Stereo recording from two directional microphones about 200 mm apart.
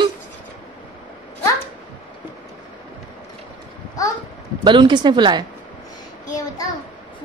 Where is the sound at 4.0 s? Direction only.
15° left (ahead or behind).